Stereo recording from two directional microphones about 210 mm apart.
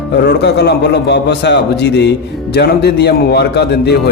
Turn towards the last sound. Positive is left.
turn(degrees=50)  # may be behind; listen again after turning